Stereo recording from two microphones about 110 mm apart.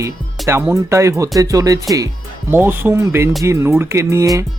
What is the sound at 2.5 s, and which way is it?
Speech, 20° right (ahead or behind).